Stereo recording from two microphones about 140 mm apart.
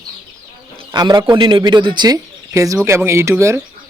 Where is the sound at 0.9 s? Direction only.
30° right (ahead or behind).